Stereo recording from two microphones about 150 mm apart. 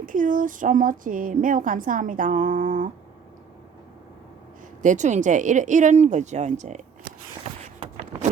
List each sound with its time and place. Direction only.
0.0 s a woman's voice: 60° right (ahead or behind)
4.8 s a woman's voice: 55° right (ahead or behind)